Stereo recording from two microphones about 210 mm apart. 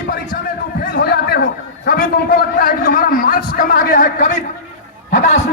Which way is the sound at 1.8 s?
45° left (ahead or behind).